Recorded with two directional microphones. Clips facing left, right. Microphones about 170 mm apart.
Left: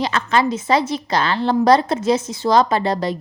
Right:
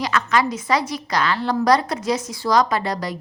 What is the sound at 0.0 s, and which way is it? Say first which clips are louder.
Speech: left 2 dB; 30° left (ahead or behind).